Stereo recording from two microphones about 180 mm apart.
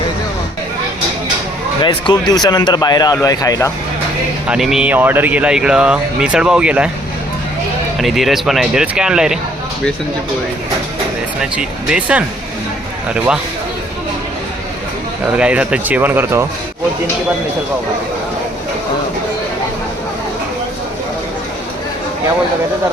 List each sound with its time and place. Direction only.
1.8 s speech: 25° left (ahead or behind)
4.4 s speech: 5° right (ahead or behind)
7.9 s speech: centre (ahead or behind)
11.3 s speech: 5° right (ahead or behind)
15.3 s speech: 5° right (ahead or behind)